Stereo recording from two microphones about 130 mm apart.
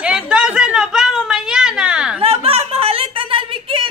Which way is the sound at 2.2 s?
50° right (ahead or behind).